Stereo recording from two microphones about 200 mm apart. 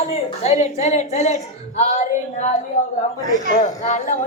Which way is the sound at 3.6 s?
35° left (ahead or behind).